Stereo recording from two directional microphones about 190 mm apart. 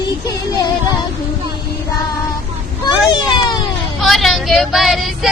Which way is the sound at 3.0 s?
20° left (ahead or behind).